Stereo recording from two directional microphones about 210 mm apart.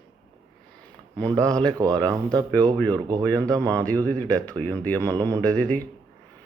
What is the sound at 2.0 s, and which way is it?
Mantra, 20° right (ahead or behind).